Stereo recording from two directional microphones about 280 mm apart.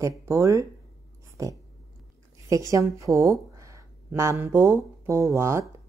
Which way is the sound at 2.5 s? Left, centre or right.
Centre.